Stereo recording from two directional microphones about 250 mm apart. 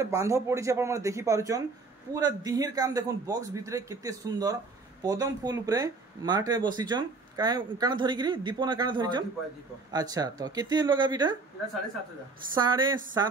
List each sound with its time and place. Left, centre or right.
0.0 s a man's voice: centre
12.5 s a man's voice: centre